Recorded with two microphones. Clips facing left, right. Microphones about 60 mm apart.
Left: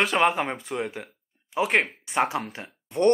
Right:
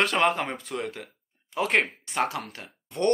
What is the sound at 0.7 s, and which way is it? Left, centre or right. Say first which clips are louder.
Speech: left 2 dB; centre.